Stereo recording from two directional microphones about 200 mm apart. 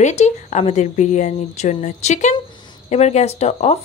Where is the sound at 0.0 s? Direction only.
35° left (ahead or behind).